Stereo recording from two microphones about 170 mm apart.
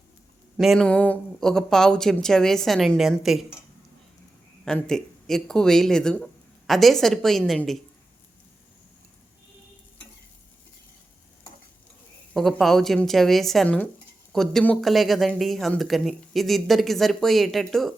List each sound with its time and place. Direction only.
0.5 s speech: centre (ahead or behind)
4.6 s speech: 5° left (ahead or behind)
12.3 s speech: centre (ahead or behind)